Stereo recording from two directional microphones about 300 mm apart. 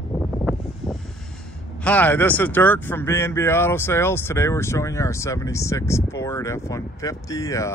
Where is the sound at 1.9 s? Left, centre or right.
Centre.